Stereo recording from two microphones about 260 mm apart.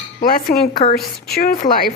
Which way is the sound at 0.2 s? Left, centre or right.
Left.